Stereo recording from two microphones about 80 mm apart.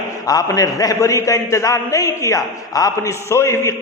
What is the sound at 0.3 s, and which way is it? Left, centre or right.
A man's voice, left.